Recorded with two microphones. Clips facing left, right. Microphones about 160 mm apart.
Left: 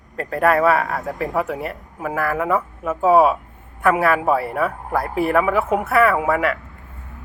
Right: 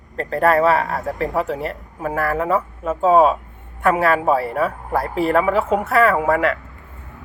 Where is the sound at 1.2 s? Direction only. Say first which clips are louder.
Right 1 dB; 10° left (ahead or behind).